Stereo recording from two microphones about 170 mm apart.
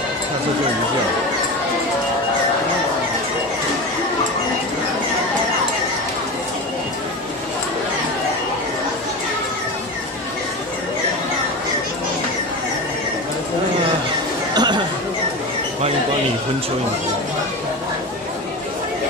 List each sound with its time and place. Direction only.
14.5 s chatter: 25° right (ahead or behind)